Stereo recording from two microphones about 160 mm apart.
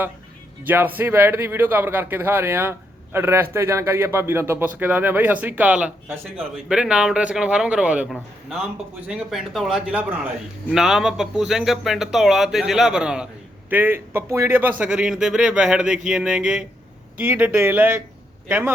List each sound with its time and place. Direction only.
0.7 s speech: 10° right (ahead or behind)